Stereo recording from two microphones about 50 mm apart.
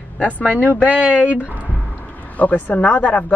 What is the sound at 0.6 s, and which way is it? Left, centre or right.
Speech, left.